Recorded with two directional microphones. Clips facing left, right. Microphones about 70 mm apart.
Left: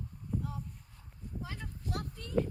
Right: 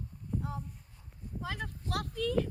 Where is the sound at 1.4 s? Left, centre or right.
Right.